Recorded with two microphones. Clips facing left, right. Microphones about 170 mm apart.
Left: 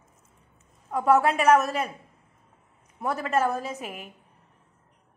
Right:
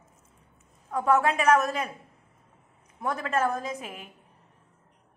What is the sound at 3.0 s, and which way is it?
A woman's voice, 5° left (ahead or behind).